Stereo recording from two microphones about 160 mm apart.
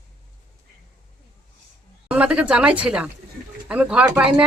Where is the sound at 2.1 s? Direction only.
5° right (ahead or behind).